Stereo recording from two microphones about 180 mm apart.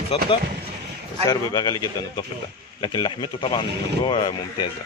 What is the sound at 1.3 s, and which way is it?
A man's voice, 20° left (ahead or behind).